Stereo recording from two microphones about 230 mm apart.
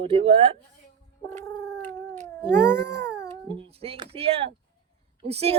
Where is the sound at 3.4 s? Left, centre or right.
Right.